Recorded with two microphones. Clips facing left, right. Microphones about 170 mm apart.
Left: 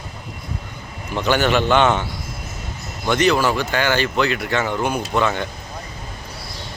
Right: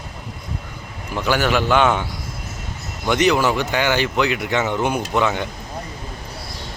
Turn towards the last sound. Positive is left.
turn(degrees=-15)  # may be behind; listen again after turning